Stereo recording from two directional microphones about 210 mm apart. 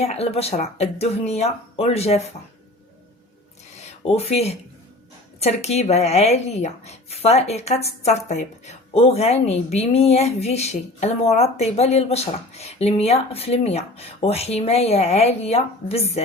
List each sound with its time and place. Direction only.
0.0 s speech: 30° left (ahead or behind)
3.8 s a sound: 30° left (ahead or behind)
5.4 s speech: 30° left (ahead or behind)